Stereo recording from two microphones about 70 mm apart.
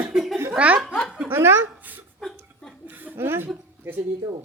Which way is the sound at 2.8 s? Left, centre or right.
Right.